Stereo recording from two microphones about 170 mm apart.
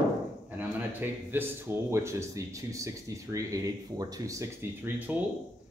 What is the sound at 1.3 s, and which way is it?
Speech, 15° right (ahead or behind).